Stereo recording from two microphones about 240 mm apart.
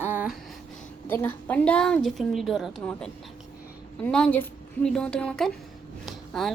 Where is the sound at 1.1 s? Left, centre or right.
Centre.